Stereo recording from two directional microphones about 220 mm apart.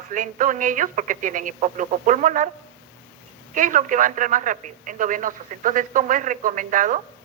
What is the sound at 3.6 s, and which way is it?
Speech, 35° right (ahead or behind).